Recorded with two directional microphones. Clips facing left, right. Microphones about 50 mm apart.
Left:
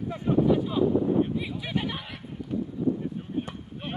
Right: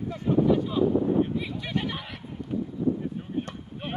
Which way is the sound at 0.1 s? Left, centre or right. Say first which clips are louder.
Even; centre.